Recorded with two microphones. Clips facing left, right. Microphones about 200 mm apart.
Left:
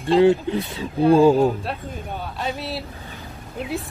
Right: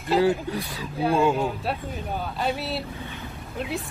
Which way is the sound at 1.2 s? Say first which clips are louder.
Left 7 dB; 35° left (ahead or behind).